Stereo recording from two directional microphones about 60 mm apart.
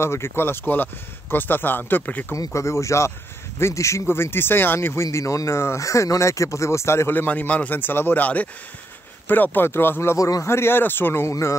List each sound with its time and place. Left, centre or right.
0.0 s speech: left
2.3 s speech: left
4.0 s speech: left
5.6 s speech: left
7.2 s a man's voice: left
9.3 s speech: left
10.1 s a man's voice: left
10.4 s speech: left
11.2 s speech: left